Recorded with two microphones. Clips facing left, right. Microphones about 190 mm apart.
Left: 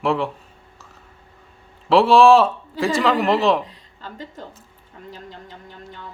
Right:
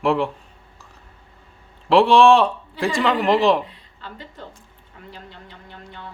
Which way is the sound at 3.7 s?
40° left (ahead or behind).